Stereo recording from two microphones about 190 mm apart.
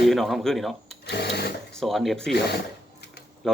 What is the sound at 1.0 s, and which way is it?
Sewing machine, 60° left (ahead or behind).